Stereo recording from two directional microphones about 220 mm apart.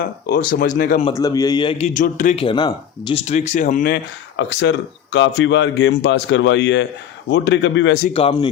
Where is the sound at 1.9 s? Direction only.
35° left (ahead or behind); by 7.9 s 55° left (ahead or behind).